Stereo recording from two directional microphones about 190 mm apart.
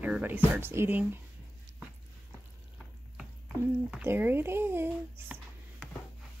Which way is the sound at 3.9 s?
10° right (ahead or behind).